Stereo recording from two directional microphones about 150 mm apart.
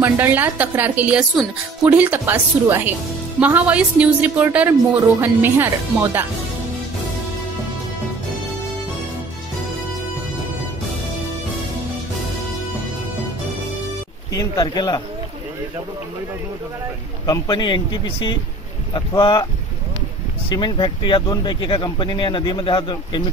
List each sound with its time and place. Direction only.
0.0 s a woman's voice: 15° right (ahead or behind)
14.3 s speech: 25° left (ahead or behind)
17.3 s speech: 30° left (ahead or behind)
20.4 s speech: 30° left (ahead or behind)